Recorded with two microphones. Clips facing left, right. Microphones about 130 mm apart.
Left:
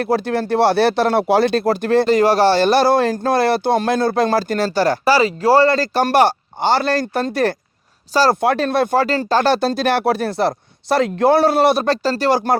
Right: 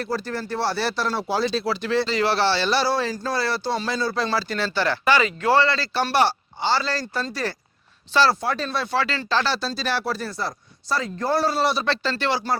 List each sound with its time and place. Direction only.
0.0 s speech: 65° left (ahead or behind)
8.1 s speech: 45° left (ahead or behind)
8.4 s speech: 60° left (ahead or behind)